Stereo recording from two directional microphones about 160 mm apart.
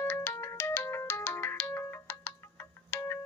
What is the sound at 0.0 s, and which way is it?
Ringtone, 10° left (ahead or behind).